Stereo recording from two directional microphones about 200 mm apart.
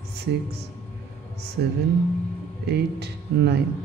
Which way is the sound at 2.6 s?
55° right (ahead or behind).